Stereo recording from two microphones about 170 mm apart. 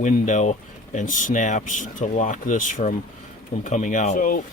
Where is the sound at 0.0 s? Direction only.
45° left (ahead or behind).